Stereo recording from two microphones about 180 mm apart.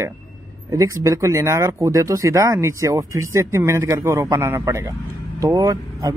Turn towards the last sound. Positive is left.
turn(degrees=-20)  # may be behind; listen again after turning